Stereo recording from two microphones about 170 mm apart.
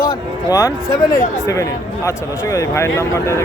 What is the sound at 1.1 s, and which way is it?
Speech, 20° left (ahead or behind).